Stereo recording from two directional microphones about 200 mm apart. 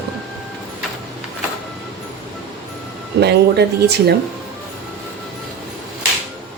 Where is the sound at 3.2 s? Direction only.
55° right (ahead or behind).